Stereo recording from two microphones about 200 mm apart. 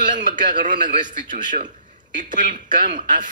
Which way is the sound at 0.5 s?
40° right (ahead or behind).